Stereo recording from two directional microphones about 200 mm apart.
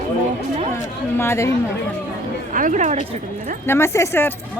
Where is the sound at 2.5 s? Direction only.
40° right (ahead or behind).